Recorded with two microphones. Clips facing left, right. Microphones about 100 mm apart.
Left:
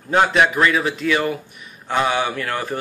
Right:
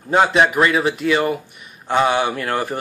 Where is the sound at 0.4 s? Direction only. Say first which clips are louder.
Right 1 dB; 30° right (ahead or behind).